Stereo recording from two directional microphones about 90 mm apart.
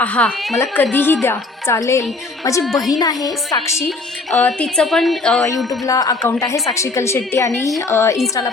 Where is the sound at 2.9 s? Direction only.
45° left (ahead or behind).